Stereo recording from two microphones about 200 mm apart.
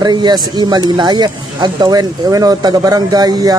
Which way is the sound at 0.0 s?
20° right (ahead or behind).